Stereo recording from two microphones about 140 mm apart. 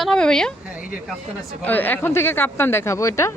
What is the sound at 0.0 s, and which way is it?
Speech, 5° left (ahead or behind).